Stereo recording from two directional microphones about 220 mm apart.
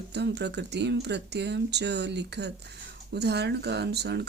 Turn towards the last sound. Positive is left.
turn(degrees=-50)  # may be behind; listen again after turning